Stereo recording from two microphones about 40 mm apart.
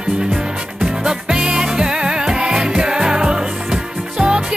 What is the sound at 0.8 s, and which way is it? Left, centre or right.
Music, centre.